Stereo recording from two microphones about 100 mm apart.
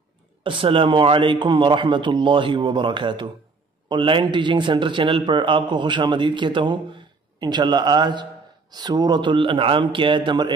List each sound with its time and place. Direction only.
0.4 s a man's voice: 60° right (ahead or behind)